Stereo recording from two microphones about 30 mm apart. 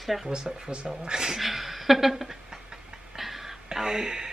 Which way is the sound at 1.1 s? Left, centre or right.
Right.